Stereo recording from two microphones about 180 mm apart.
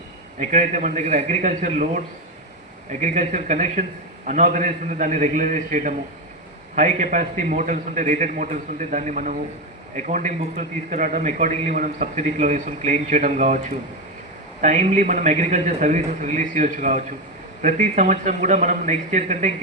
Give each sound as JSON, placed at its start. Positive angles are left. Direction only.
{"t": 0.3, "sound": "a man's voice", "side_deg": -45}
{"t": 3.0, "sound": "a man's voice", "side_deg": -45}